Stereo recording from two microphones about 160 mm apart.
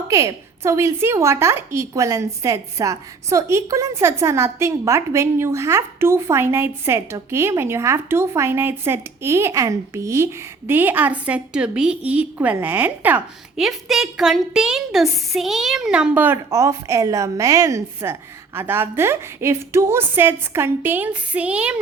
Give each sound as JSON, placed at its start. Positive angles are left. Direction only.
{"t": 0.1, "sound": "a woman's voice", "side_deg": -20}